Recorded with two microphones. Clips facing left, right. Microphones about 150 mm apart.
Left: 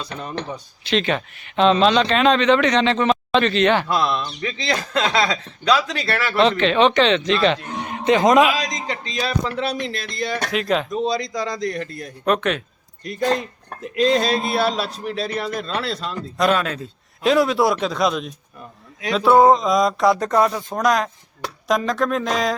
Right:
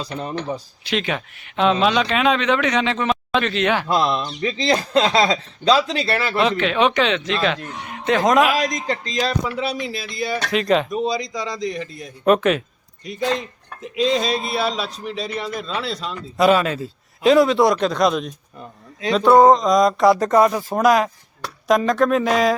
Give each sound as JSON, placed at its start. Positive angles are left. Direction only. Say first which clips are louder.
{"t": 0.0, "sound": "speech", "louder": "right 2 dB", "side_deg": -30}
{"t": 0.9, "sound": "speech", "louder": "left 3 dB", "side_deg": -10}
{"t": 3.8, "sound": "speech", "louder": "right 2 dB", "side_deg": -30}
{"t": 6.3, "sound": "a man's voice", "louder": "left 4 dB", "side_deg": -5}
{"t": 8.5, "sound": "speech", "louder": "right 4 dB", "side_deg": -50}
{"t": 9.4, "sound": "a man's voice", "louder": "even", "side_deg": -5}
{"t": 13.8, "sound": "a man's voice", "louder": "left 2 dB", "side_deg": 0}